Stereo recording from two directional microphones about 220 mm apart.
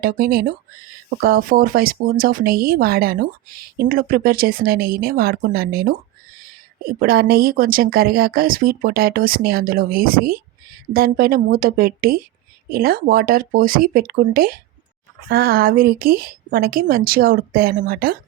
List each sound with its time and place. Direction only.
0.0 s speech: 40° right (ahead or behind)
7.0 s speech: 45° right (ahead or behind)